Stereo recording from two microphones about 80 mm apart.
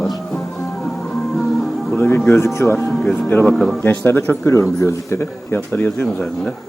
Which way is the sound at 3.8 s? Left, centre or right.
Left.